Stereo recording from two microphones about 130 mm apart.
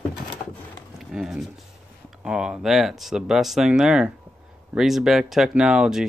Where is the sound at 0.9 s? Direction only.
Centre (ahead or behind).